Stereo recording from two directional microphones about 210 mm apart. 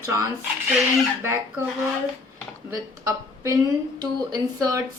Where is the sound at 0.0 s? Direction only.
15° right (ahead or behind).